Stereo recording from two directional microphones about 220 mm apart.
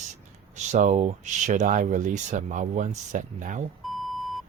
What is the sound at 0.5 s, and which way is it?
Speech, 30° right (ahead or behind).